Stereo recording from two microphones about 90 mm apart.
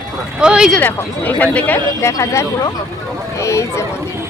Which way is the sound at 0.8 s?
20° left (ahead or behind).